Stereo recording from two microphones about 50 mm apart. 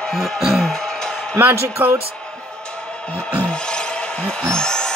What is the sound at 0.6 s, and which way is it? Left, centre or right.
Music, centre.